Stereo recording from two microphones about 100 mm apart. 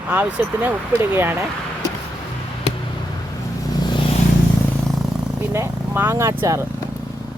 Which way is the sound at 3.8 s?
45° left (ahead or behind).